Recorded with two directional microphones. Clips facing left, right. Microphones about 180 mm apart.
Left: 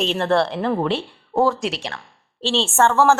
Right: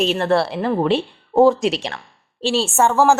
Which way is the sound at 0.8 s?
15° right (ahead or behind).